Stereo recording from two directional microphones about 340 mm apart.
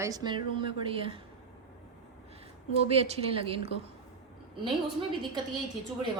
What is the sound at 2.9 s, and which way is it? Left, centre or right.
Speech, centre.